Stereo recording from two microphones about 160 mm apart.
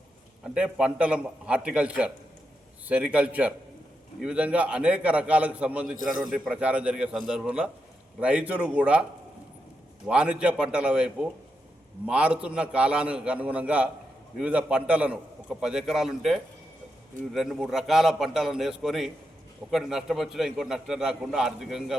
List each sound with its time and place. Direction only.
0.4 s a man's voice: 5° right (ahead or behind)
6.0 s a man's voice: 60° right (ahead or behind)
6.3 s a man's voice: 5° right (ahead or behind)
10.1 s a man's voice: 5° right (ahead or behind)